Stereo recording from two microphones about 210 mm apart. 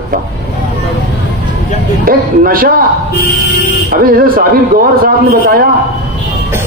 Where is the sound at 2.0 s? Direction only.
45° right (ahead or behind).